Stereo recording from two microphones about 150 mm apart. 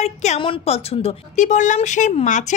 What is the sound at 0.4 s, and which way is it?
Speech, 40° left (ahead or behind).